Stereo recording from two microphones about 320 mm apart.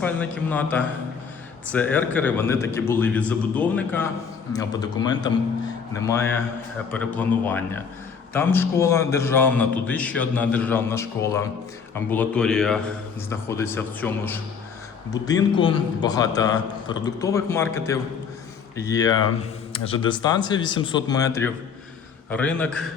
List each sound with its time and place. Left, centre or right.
0.0 s a man's voice: centre